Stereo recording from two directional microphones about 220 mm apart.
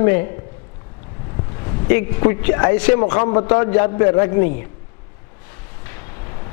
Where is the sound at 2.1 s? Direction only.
15° left (ahead or behind).